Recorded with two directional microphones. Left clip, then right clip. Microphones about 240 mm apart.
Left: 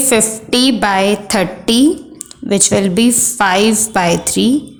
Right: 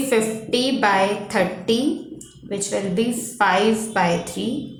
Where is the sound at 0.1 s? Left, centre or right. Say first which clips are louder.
Left 6 dB; left.